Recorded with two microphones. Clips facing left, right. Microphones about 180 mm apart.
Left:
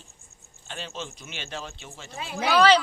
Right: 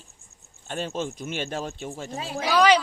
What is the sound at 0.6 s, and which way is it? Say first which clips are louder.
Speech: right 7 dB; 45° right (ahead or behind).